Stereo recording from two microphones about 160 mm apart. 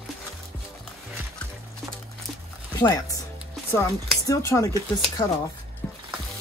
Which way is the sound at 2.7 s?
25° left (ahead or behind).